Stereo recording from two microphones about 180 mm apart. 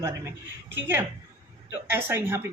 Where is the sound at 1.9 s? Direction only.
10° right (ahead or behind).